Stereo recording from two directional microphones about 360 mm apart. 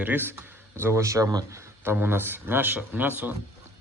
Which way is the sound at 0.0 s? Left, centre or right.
Centre.